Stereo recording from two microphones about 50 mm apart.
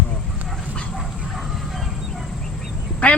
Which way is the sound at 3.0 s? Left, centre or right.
Left.